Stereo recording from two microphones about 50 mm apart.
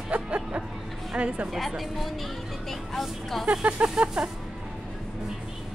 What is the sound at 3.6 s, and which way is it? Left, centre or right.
Speech, right.